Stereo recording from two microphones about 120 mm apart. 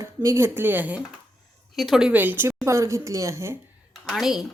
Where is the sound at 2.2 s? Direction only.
15° right (ahead or behind).